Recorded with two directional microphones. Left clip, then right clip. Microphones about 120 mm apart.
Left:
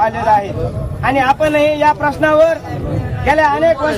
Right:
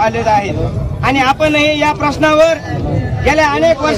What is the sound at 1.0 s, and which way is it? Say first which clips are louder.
A man's voice: right 1 dB; 15° right (ahead or behind).